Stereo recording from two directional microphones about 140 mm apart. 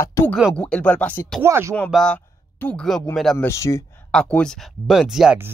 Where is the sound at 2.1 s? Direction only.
10° left (ahead or behind).